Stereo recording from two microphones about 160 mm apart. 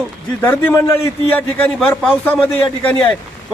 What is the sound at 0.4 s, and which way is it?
A man's voice, 15° left (ahead or behind).